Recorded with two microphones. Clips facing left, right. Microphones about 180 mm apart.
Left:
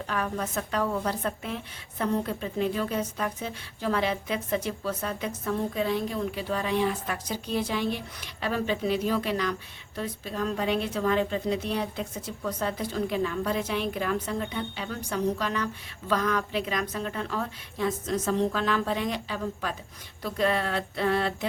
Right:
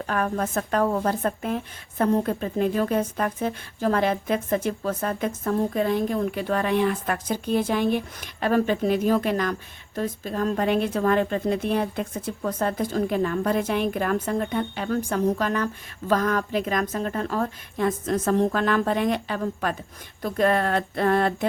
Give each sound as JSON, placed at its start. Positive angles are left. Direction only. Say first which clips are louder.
{"t": 0.1, "sound": "a woman's voice", "louder": "right 5 dB", "side_deg": -50}